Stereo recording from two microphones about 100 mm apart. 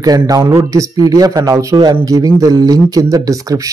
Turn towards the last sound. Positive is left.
turn(degrees=-35)  # may be behind; listen again after turning